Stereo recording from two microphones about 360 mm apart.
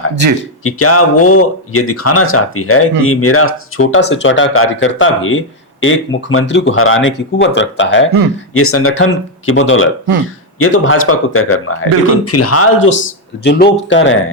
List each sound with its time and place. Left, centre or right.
0.6 s speech: left